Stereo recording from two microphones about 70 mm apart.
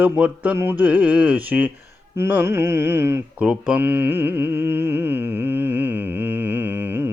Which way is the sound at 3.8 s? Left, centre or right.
Right.